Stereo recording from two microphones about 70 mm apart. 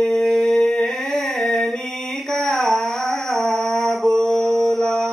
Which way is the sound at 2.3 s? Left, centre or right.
Centre.